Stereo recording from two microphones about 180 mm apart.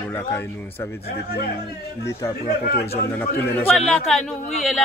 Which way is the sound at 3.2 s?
15° left (ahead or behind).